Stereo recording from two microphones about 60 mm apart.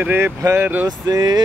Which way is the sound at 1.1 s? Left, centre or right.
Right.